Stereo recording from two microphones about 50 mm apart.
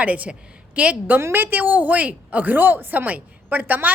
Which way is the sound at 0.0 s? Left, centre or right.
Right.